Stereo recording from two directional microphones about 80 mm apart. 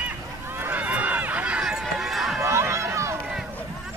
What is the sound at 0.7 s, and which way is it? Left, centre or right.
Run, centre.